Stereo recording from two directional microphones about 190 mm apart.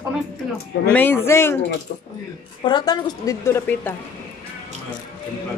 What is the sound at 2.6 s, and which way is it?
A woman's voice, 20° left (ahead or behind).